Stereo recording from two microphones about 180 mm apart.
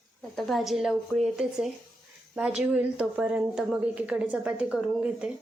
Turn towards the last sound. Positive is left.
turn(degrees=-5)  # may be behind; listen again after turning